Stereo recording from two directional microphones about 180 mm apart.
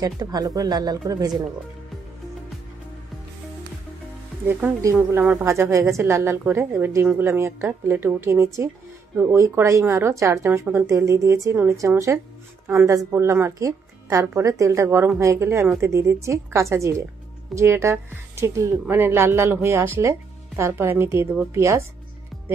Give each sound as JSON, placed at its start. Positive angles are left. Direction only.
{"t": 0.0, "sound": "speech", "side_deg": -20}
{"t": 4.5, "sound": "a woman's voice", "side_deg": -10}